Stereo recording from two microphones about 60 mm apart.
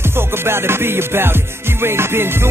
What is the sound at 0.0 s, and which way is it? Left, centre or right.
Music, right.